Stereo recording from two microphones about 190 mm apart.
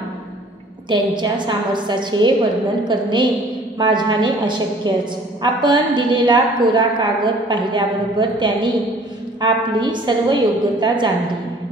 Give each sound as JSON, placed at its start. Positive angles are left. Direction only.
{"t": 0.8, "sound": "a woman's voice", "side_deg": -25}